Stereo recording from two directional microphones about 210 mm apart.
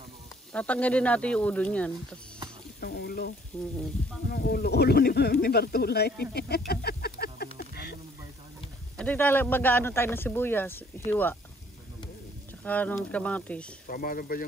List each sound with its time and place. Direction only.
0.5 s speech: 5° left (ahead or behind)
2.8 s speech: 50° left (ahead or behind)
7.5 s a sound: 50° left (ahead or behind)
8.9 s speech: 10° left (ahead or behind)
12.6 s speech: 5° left (ahead or behind)
13.8 s speech: 40° left (ahead or behind)